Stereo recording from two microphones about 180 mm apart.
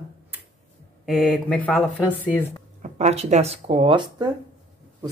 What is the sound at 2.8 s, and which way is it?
Speech, 35° right (ahead or behind).